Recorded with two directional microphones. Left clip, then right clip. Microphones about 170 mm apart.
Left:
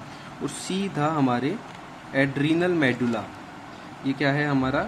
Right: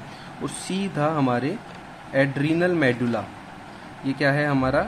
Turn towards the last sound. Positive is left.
turn(degrees=-20)  # may be behind; listen again after turning